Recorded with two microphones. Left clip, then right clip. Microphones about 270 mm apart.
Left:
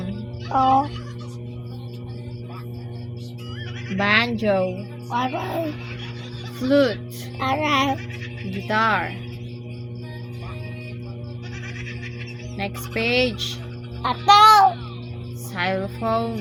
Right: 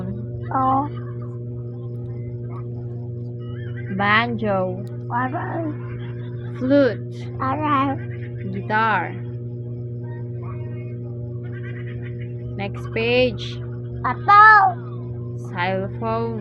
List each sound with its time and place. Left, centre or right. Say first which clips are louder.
0.5 s child singing: left 2 dB; centre
3.9 s music: right 1 dB; left
5.1 s child singing: even; centre
6.6 s music: right 1 dB; left
7.4 s child singing: even; centre
8.6 s music: right 1 dB; left
12.5 s music: right 1 dB; left
14.3 s child singing: right 1 dB; centre
15.5 s music: right 1 dB; left